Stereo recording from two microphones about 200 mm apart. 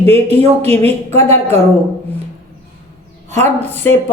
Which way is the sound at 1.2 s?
30° right (ahead or behind).